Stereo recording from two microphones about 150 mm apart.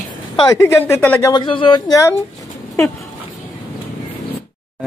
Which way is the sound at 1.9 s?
20° left (ahead or behind).